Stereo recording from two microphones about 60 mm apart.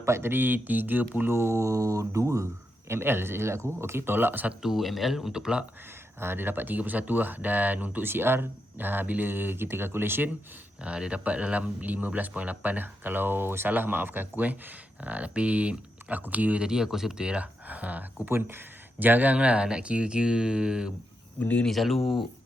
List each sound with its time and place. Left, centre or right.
0.0 s speech: right
1.3 s mantra: right
2.9 s speech: right
4.6 s speech: centre
6.1 s speech: right
10.8 s speech: centre
16.6 s speech: centre; by 18.3 s right
18.3 s speech: right; by 20.9 s centre
21.3 s speech: left
21.7 s speech: centre